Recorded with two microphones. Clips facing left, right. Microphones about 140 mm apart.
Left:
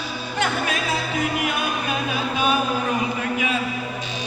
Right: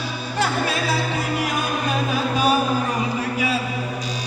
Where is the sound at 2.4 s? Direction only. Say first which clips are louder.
Right 2 dB; 40° right (ahead or behind).